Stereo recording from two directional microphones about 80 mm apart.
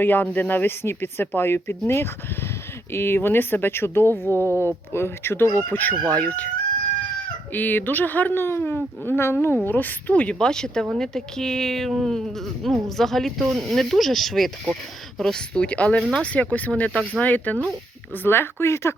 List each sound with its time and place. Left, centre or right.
0.0 s speech: left
2.9 s a woman's voice: left
7.5 s a woman's voice: left